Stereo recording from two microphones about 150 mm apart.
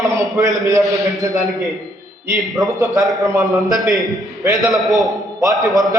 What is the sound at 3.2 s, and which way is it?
Speech, 20° right (ahead or behind).